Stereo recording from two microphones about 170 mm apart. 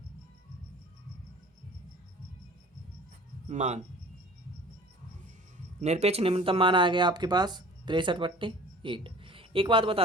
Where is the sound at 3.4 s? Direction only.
40° right (ahead or behind).